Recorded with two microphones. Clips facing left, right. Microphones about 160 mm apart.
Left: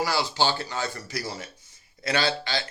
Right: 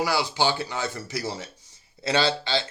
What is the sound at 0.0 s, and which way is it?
A man's voice, 15° right (ahead or behind).